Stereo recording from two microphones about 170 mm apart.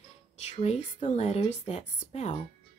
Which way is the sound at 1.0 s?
40° left (ahead or behind).